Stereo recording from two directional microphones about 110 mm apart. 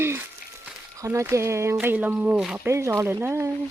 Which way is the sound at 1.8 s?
15° right (ahead or behind).